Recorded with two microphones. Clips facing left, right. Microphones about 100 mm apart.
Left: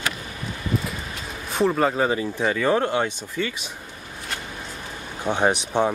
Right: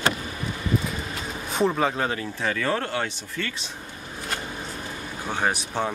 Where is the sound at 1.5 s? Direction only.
Centre (ahead or behind).